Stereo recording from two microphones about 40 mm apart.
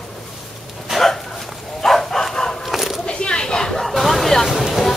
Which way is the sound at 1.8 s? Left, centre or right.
Centre.